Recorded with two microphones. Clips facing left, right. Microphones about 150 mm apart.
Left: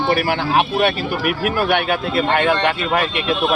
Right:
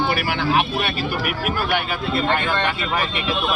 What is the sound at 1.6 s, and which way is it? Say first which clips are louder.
Speech: left 4 dB; 65° left (ahead or behind).